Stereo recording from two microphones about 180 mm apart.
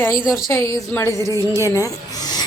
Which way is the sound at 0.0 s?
20° left (ahead or behind).